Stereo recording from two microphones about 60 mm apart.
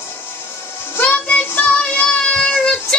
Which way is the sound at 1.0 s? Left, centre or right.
Left.